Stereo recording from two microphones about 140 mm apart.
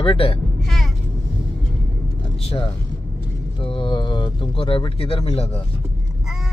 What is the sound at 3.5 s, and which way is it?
Speech, 35° left (ahead or behind).